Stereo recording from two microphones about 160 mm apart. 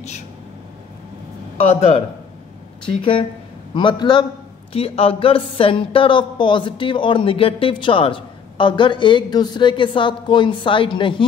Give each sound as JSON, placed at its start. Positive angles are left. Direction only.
{"t": 1.6, "sound": "a man's voice", "side_deg": 40}